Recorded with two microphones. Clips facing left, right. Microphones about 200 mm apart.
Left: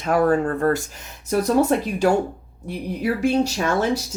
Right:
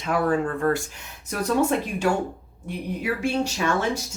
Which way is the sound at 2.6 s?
35° left (ahead or behind).